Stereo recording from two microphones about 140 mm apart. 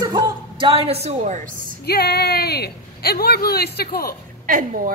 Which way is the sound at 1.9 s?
90° left.